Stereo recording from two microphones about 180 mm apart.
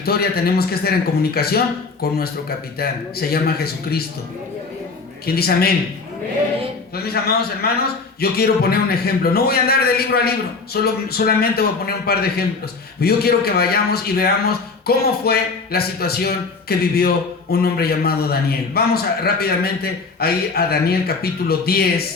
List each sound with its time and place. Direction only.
0.0 s a man's voice: 60° left (ahead or behind)
5.2 s a man's voice: 60° left (ahead or behind)
6.9 s a man's voice: 60° left (ahead or behind)